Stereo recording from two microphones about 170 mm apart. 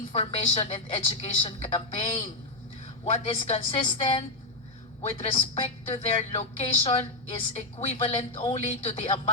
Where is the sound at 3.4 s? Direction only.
35° left (ahead or behind).